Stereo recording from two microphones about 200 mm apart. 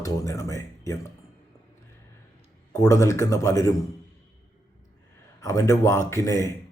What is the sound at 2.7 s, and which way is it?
Speech, 15° left (ahead or behind).